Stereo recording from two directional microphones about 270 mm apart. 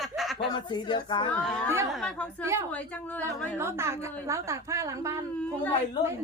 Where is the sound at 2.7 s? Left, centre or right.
Centre.